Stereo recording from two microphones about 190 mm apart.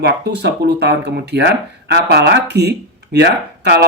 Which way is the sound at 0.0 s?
60° right (ahead or behind).